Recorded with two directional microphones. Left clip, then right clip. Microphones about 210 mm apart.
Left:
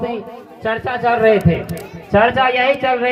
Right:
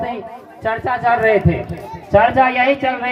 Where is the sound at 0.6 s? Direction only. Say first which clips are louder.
Right 1 dB; 45° right (ahead or behind).